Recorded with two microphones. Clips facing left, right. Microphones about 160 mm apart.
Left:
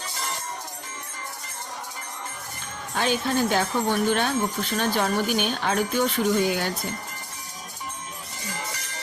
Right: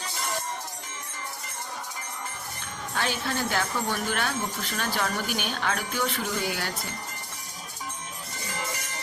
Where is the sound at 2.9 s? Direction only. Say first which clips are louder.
Left 6 dB; 20° left (ahead or behind).